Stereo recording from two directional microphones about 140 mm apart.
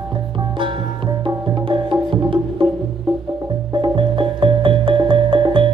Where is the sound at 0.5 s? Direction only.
35° right (ahead or behind).